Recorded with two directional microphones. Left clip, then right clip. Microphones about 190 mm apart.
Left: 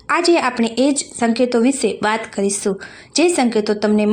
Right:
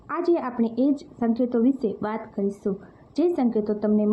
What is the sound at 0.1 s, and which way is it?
A woman's voice, 20° left (ahead or behind).